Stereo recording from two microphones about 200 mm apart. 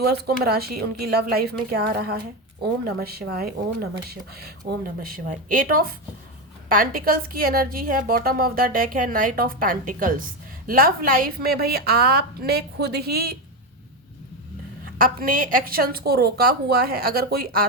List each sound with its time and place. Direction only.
0.0 s a woman's voice: 50° right (ahead or behind)
14.9 s a woman's voice: 45° right (ahead or behind)